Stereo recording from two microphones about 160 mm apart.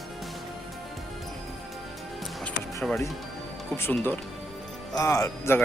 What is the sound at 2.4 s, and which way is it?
Music, 5° left (ahead or behind).